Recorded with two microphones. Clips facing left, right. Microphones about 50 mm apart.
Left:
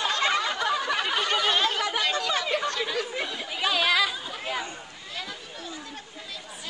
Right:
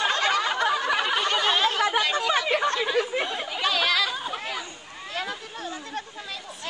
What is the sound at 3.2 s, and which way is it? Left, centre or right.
Chatter, right.